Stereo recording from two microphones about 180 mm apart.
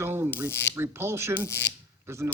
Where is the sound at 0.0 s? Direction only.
15° right (ahead or behind).